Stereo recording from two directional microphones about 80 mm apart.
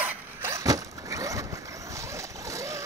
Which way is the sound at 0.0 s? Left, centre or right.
Right.